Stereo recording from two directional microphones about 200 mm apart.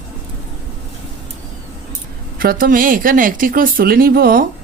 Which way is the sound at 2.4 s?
45° right (ahead or behind).